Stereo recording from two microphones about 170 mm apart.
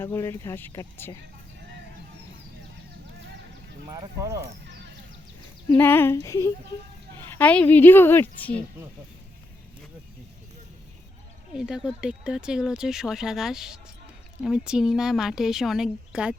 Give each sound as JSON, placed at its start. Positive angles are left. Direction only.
{"t": 0.0, "sound": "a woman's voice", "side_deg": 15}
{"t": 3.8, "sound": "speech", "side_deg": -20}
{"t": 5.7, "sound": "a woman's voice", "side_deg": 10}
{"t": 7.3, "sound": "a woman's voice", "side_deg": 10}
{"t": 11.5, "sound": "speech", "side_deg": -5}